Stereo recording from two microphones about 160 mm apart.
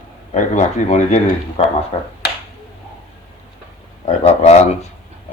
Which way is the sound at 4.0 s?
45° left (ahead or behind).